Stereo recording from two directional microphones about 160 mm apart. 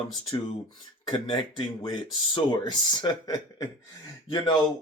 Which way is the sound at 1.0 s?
30° left (ahead or behind).